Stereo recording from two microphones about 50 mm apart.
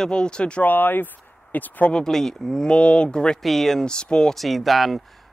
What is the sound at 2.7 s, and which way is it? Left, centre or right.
Speech, centre.